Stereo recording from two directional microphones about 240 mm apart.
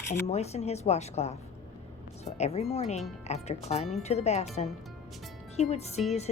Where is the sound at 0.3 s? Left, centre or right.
Left.